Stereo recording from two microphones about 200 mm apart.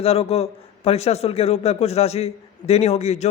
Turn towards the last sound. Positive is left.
turn(degrees=35)  # may be behind; listen again after turning